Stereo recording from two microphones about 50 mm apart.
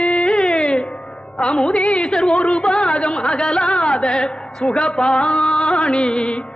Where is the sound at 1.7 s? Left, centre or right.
Centre.